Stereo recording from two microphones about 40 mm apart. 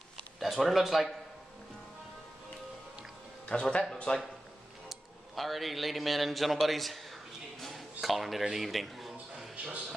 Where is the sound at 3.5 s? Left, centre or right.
Left.